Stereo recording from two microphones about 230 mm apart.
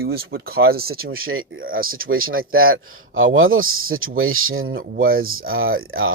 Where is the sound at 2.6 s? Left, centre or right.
Right.